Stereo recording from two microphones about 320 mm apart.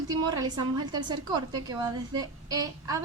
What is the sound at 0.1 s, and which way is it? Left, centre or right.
A woman's voice, centre.